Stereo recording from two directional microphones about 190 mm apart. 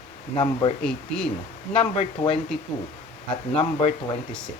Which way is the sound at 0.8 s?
5° left (ahead or behind).